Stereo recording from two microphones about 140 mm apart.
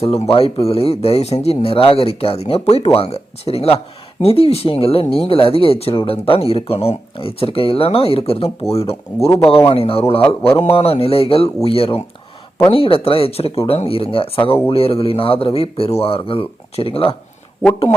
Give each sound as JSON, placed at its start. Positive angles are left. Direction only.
{"t": 0.0, "sound": "a man's voice", "side_deg": 45}